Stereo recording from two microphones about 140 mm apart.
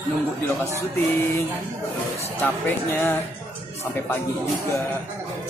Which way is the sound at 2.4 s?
15° left (ahead or behind).